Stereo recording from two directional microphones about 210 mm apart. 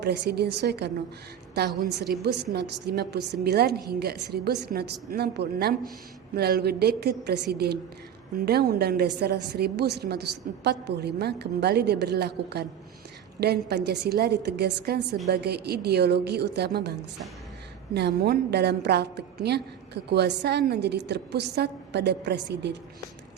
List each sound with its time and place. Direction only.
0.0 s a woman's voice: 50° right (ahead or behind)
17.9 s a woman's voice: 50° right (ahead or behind)